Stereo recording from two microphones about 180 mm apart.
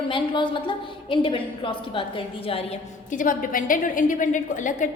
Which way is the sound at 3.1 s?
50° left (ahead or behind).